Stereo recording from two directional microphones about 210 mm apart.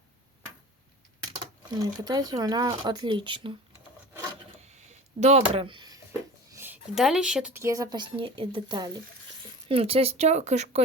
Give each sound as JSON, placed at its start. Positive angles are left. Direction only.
{"t": 1.8, "sound": "speech", "side_deg": -20}
{"t": 4.7, "sound": "a sound", "side_deg": -30}
{"t": 6.6, "sound": "a woman's voice", "side_deg": -5}